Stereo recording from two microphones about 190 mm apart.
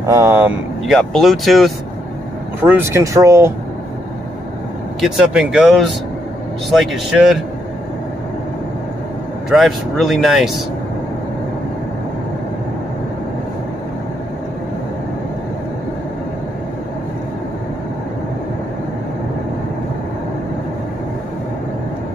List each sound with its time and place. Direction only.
0.0 s speech: 15° right (ahead or behind)
0.8 s speech: centre (ahead or behind)
2.6 s speech: 10° right (ahead or behind)
5.0 s speech: centre (ahead or behind)
9.5 s speech: centre (ahead or behind)